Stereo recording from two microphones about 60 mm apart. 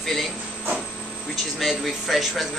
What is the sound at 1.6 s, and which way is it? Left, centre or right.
Speech, centre.